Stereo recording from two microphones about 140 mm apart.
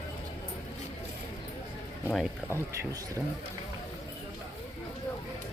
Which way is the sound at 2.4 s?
20° right (ahead or behind).